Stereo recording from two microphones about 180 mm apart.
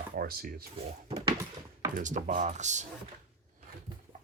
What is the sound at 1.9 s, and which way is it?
Speech, 45° right (ahead or behind).